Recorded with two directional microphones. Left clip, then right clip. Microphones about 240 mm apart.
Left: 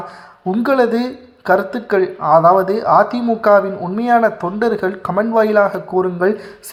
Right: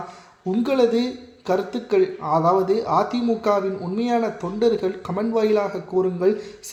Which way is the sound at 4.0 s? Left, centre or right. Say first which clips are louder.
Left 10 dB; centre.